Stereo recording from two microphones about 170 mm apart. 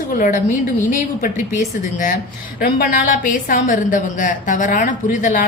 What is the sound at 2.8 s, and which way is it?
A woman's voice, 50° left (ahead or behind).